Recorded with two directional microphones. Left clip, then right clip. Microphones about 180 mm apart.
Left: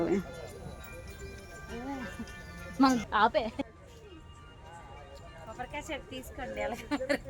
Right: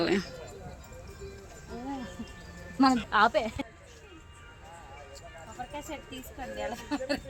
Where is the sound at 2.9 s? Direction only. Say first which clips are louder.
Right 4 dB; 50° right (ahead or behind).